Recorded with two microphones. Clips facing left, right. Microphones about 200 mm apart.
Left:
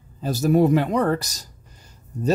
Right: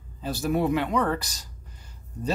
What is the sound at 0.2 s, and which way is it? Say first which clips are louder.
Speech: left 7 dB; 40° left (ahead or behind).